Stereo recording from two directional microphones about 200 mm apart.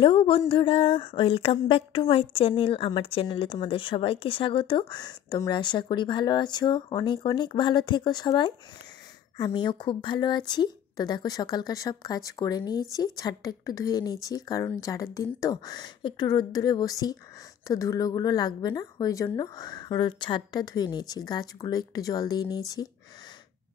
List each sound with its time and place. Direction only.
0.0 s speech: 25° left (ahead or behind)